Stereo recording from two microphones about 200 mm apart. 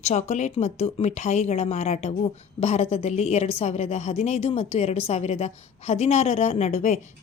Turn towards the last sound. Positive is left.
turn(degrees=35)  # may be behind; listen again after turning